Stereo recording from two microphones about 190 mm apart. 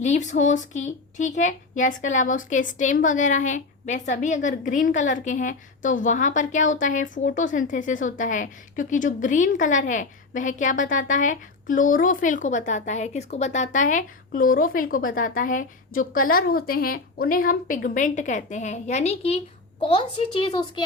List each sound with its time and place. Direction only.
0.0 s a woman's voice: 40° left (ahead or behind); by 20.8 s 25° left (ahead or behind)